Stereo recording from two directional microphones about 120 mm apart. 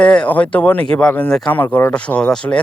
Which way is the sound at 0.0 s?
10° left (ahead or behind).